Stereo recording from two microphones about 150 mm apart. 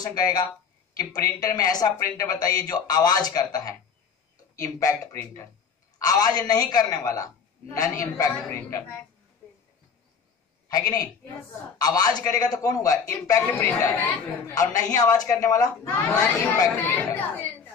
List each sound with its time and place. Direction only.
0.0 s speech: 25° left (ahead or behind)
8.4 s a child's voice: 10° left (ahead or behind)
10.7 s speech: 25° left (ahead or behind)
16.9 s a child's voice: 10° left (ahead or behind)